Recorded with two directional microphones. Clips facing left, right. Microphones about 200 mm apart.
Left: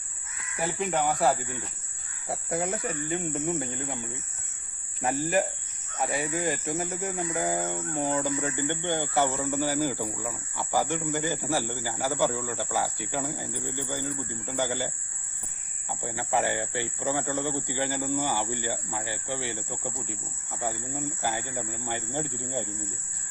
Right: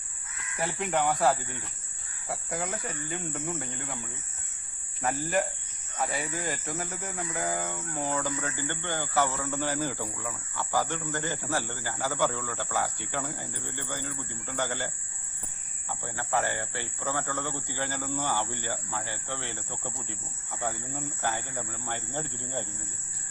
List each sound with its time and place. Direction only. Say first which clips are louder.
0.6 s speech: left 1 dB; 5° left (ahead or behind)
2.2 s speech: left 4 dB; 30° left (ahead or behind)
5.0 s speech: left 2 dB; 15° left (ahead or behind)